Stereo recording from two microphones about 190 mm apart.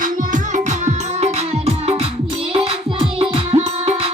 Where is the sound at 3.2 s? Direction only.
30° right (ahead or behind).